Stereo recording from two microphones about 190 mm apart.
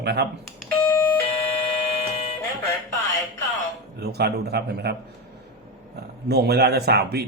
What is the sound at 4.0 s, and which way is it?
Speech, 60° right (ahead or behind).